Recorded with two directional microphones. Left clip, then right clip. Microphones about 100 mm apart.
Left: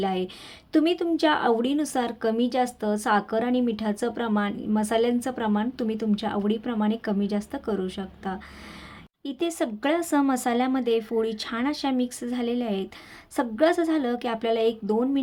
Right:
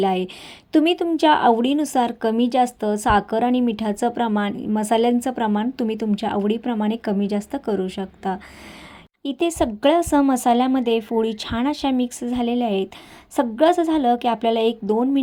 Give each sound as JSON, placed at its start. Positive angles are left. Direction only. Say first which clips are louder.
{"t": 0.0, "sound": "a woman's voice", "louder": "right 6 dB", "side_deg": -50}